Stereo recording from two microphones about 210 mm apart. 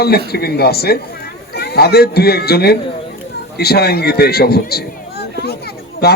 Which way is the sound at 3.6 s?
50° left (ahead or behind).